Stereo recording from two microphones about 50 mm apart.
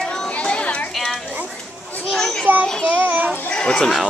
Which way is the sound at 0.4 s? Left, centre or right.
Left.